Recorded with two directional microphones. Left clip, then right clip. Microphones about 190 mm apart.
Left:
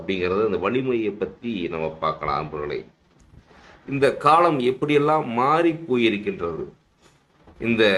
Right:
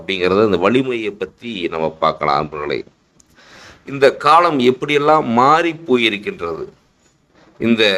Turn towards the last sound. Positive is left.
turn(degrees=-40)  # may be behind; listen again after turning